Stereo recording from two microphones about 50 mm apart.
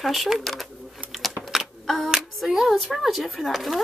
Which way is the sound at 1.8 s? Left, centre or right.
Centre.